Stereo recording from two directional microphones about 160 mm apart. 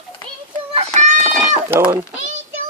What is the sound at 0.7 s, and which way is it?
Chicken, 45° right (ahead or behind).